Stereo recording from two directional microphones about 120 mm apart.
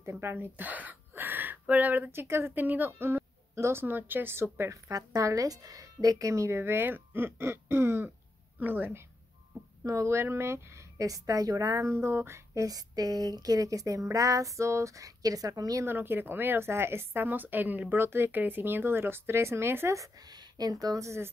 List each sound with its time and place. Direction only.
0.0 s speech: 20° right (ahead or behind)